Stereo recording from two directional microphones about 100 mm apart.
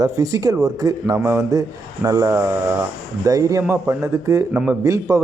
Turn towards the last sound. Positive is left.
turn(degrees=-30)  # may be behind; listen again after turning